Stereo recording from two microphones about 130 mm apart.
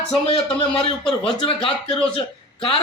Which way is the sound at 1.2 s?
45° left (ahead or behind).